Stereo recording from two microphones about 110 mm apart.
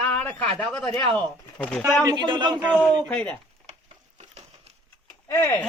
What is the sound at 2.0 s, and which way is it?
Speech, 45° right (ahead or behind).